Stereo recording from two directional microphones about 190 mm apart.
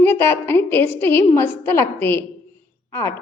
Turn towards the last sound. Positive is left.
turn(degrees=15)  # may be behind; listen again after turning